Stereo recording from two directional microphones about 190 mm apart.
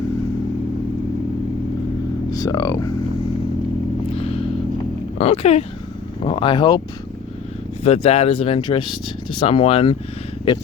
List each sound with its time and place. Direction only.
2.3 s speech: 20° left (ahead or behind)
4.1 s vehicle: 30° left (ahead or behind)
5.1 s speech: 35° left (ahead or behind)
7.9 s speech: 30° left (ahead or behind)